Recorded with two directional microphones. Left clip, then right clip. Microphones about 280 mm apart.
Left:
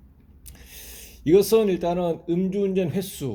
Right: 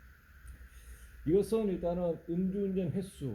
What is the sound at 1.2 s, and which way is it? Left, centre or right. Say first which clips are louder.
Speech: left 12 dB; left.